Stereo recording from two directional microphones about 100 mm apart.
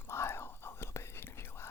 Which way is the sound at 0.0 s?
25° left (ahead or behind).